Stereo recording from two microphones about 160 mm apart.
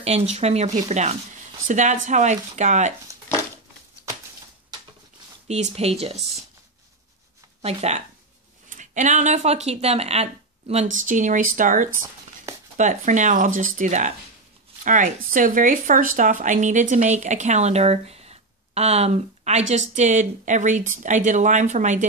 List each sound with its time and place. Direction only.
0.0 s speech: 40° right (ahead or behind)
5.5 s speech: 40° right (ahead or behind)
7.6 s speech: 45° right (ahead or behind)
11.9 s a sound: 15° right (ahead or behind)
12.7 s speech: 50° right (ahead or behind)